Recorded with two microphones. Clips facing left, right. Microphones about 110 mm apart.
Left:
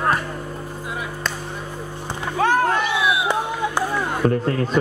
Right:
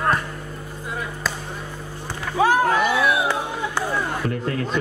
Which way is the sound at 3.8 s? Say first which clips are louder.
Left 1 dB; 15° left (ahead or behind).